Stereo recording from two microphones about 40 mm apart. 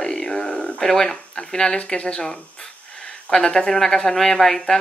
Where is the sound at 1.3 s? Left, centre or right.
Left.